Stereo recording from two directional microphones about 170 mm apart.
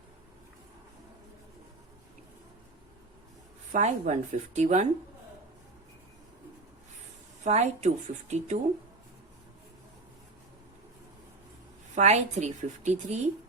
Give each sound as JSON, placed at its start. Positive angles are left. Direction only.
{"t": 3.7, "sound": "a woman's voice", "side_deg": -45}
{"t": 7.4, "sound": "speech", "side_deg": -40}
{"t": 11.9, "sound": "a woman's voice", "side_deg": -40}